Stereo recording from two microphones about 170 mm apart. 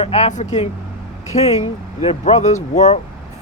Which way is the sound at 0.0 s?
40° left (ahead or behind).